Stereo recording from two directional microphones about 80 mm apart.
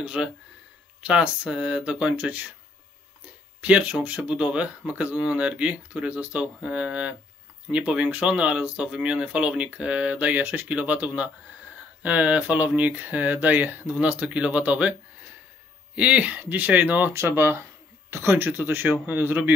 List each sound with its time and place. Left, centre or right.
0.0 s speech: centre
3.6 s speech: centre
17.1 s speech: right